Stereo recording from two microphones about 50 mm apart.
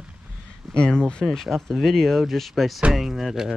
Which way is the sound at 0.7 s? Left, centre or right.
Centre.